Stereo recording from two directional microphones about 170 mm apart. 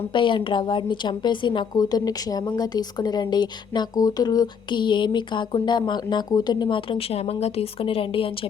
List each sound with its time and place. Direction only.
0.1 s a woman's voice: 30° left (ahead or behind)